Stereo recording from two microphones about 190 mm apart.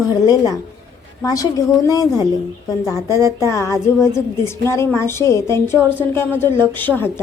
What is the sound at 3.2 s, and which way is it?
Speech, 15° right (ahead or behind).